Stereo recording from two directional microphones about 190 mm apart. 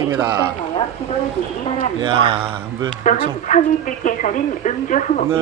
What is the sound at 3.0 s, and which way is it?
A woman's voice, 45° left (ahead or behind).